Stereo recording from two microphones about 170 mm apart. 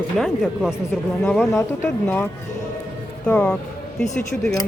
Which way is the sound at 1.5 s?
15° left (ahead or behind).